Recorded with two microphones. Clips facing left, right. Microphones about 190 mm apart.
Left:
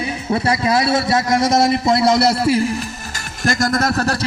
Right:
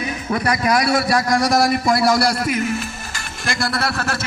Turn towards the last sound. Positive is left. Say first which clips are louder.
# left 5 dB
turn(degrees=40)  # may be behind; listen again after turning